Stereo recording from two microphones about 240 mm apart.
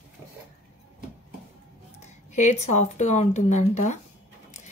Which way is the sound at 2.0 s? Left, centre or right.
Left.